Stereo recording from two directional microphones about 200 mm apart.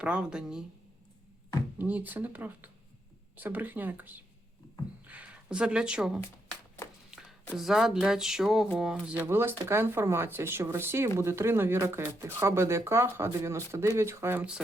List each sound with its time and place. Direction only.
0.0 s a woman's voice: 5° right (ahead or behind)
1.8 s speech: 10° right (ahead or behind)
7.1 s a sound: centre (ahead or behind)
7.5 s speech: centre (ahead or behind)